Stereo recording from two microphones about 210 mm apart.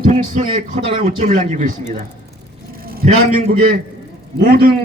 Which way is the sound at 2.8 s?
45° right (ahead or behind).